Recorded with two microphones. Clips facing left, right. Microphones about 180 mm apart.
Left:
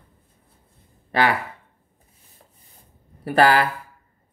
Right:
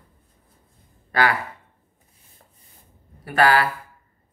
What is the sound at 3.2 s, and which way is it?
Speech, 40° left (ahead or behind).